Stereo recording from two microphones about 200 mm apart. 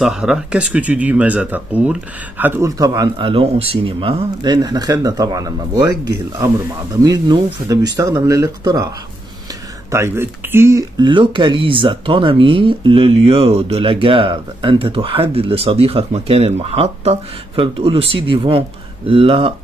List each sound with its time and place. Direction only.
0.0 s speech: 5° right (ahead or behind)
9.8 s speech: 15° right (ahead or behind); by 19.5 s 30° right (ahead or behind)